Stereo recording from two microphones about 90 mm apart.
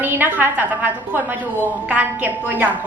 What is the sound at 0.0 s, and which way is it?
A woman's voice, 20° right (ahead or behind).